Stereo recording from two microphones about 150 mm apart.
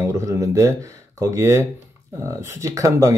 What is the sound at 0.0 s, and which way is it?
Speech, 20° right (ahead or behind).